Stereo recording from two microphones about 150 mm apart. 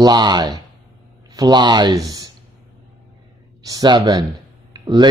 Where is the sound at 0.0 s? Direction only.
30° right (ahead or behind).